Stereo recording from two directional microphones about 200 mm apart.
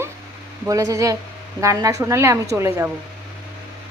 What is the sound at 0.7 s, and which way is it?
A woman's voice, 15° right (ahead or behind).